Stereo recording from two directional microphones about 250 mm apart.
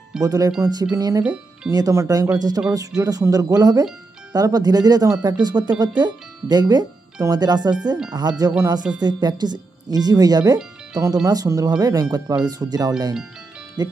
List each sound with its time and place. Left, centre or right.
0.2 s speech: centre
1.2 s speech: centre